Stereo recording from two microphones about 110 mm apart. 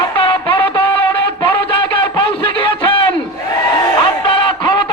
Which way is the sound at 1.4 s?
55° left (ahead or behind).